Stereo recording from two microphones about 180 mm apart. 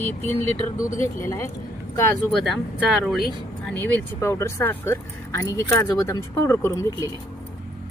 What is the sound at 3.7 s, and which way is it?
Speech, 15° left (ahead or behind).